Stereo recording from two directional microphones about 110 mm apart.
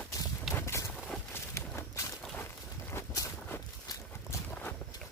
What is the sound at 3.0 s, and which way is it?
Walk, 25° left (ahead or behind).